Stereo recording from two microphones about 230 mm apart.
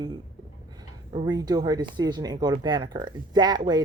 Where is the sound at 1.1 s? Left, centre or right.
Right.